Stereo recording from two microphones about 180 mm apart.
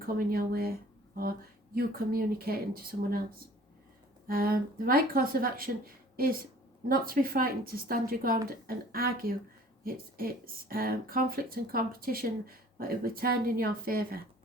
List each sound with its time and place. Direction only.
0.0 s speech: 55° right (ahead or behind)
4.3 s speech: 55° right (ahead or behind)